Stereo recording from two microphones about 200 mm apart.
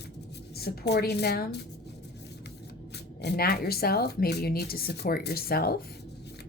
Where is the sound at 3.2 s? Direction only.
55° left (ahead or behind).